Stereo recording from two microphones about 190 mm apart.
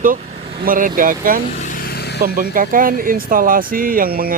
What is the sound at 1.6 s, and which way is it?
Vehicle, 50° left (ahead or behind).